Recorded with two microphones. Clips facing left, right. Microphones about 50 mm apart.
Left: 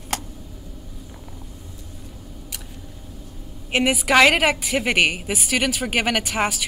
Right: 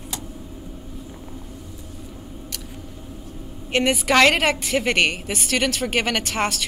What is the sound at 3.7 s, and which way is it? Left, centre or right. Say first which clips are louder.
A woman's voice: even; centre.